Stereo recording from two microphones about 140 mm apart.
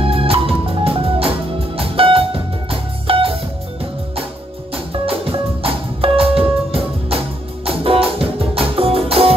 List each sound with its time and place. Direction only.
0.0 s music: 40° right (ahead or behind)
4.9 s music: 45° right (ahead or behind)